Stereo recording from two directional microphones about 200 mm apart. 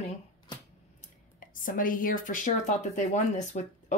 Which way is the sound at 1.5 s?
45° left (ahead or behind).